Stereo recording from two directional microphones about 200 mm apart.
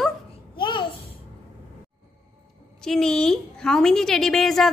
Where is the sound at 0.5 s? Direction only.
25° left (ahead or behind).